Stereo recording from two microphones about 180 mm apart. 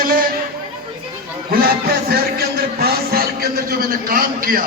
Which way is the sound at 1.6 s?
60° right (ahead or behind).